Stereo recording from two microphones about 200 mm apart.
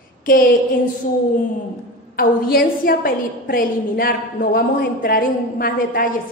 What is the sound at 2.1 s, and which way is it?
A woman's voice, 45° left (ahead or behind).